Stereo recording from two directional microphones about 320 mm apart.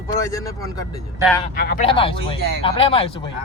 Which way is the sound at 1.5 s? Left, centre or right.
Left.